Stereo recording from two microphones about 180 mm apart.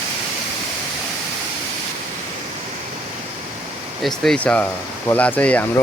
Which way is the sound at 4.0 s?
Centre (ahead or behind).